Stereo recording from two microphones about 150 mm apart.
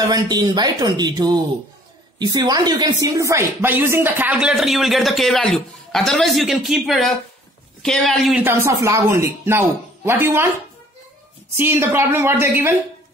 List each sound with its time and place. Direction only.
0.1 s a woman's voice: 25° right (ahead or behind); by 8.4 s centre (ahead or behind)
8.4 s speech: 15° right (ahead or behind)
11.5 s speech: 15° right (ahead or behind)